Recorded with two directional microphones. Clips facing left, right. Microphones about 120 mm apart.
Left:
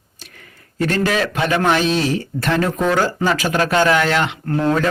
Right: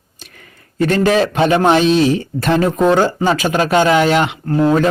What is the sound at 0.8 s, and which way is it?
Speech, 25° right (ahead or behind).